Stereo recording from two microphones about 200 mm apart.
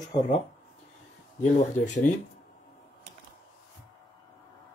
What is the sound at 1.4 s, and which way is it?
Speech, 35° left (ahead or behind).